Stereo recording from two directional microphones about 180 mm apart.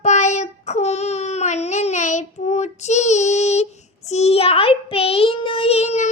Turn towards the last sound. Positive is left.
turn(degrees=40)  # may be behind; listen again after turning